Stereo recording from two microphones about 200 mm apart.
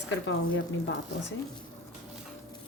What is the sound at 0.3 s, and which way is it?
Speech, 65° left (ahead or behind).